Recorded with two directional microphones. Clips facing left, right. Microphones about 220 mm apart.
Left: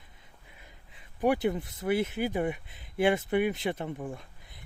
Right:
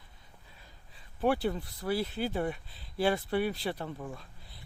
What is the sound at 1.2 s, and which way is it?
Speech, 15° left (ahead or behind).